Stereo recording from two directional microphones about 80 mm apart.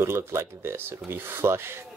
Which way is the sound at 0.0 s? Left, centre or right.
Right.